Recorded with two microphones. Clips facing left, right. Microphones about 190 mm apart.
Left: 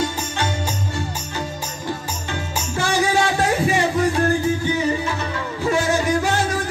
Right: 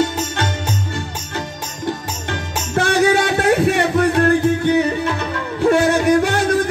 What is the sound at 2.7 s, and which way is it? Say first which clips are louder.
Music: right 5 dB; 60° right (ahead or behind).